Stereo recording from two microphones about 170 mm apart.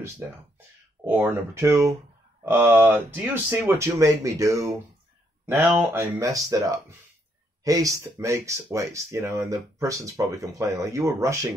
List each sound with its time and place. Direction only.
1.0 s speech: 15° right (ahead or behind)